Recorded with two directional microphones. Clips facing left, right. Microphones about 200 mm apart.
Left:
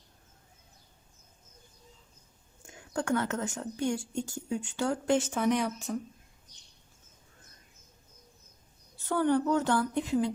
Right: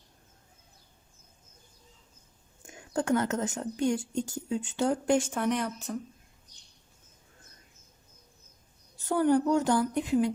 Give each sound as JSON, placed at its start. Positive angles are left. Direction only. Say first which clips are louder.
{"t": 2.7, "sound": "speech", "louder": "right 3 dB", "side_deg": -20}
{"t": 5.3, "sound": "speech", "louder": "left 1 dB", "side_deg": 0}
{"t": 9.0, "sound": "a woman's voice", "louder": "right 2 dB", "side_deg": -15}